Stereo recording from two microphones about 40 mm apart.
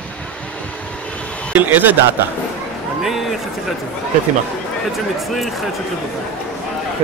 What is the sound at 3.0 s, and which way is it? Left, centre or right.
Speech, centre.